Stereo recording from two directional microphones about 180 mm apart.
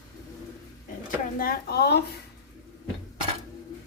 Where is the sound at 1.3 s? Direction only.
55° left (ahead or behind).